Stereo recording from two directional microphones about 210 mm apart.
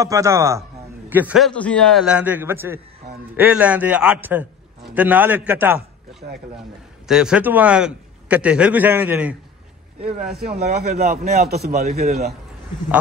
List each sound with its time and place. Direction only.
0.0 s a man's voice: 15° right (ahead or behind)
6.2 s a man's voice: 45° right (ahead or behind)
7.1 s a man's voice: 5° right (ahead or behind)
10.0 s a man's voice: 45° right (ahead or behind)